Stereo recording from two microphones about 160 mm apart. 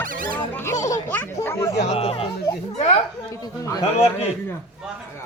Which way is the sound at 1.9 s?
40° left (ahead or behind).